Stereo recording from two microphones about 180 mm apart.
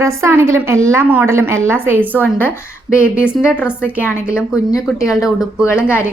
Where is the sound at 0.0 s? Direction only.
15° right (ahead or behind).